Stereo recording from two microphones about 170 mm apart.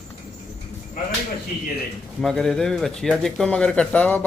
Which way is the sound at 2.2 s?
5° left (ahead or behind).